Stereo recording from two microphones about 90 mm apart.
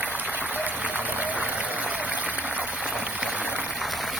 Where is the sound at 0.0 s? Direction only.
20° right (ahead or behind).